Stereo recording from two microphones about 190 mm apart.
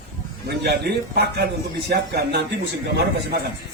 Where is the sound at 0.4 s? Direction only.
55° right (ahead or behind).